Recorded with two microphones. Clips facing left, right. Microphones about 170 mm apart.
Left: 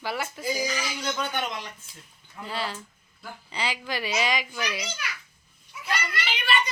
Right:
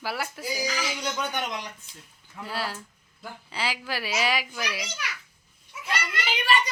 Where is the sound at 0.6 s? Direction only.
80° right.